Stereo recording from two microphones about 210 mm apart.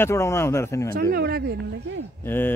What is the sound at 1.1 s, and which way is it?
Speech, 50° right (ahead or behind).